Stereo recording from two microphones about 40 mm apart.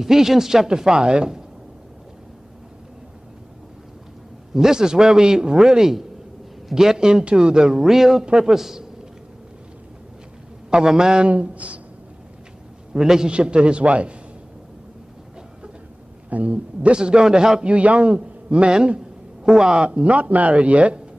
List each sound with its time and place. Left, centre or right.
0.0 s a man's voice: centre
4.6 s a man's voice: centre
10.9 s a man's voice: centre
11.2 s speech: right
12.9 s a man's voice: centre; by 14.1 s right
16.3 s speech: right
16.9 s a man's voice: right
17.6 s a man's voice: right
19.4 s a man's voice: centre
19.8 s speech: right